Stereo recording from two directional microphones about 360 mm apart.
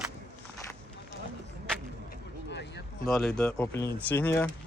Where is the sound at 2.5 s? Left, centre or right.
Left.